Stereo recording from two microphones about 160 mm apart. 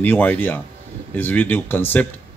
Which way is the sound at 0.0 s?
10° left (ahead or behind).